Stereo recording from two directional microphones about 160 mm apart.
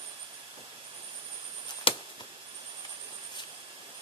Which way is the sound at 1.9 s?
35° left (ahead or behind).